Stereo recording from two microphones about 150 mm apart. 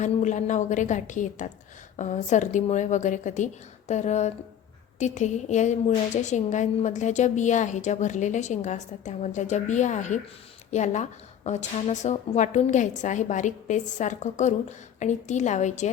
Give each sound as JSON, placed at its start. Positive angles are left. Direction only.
{"t": 0.0, "sound": "a woman's voice", "side_deg": 55}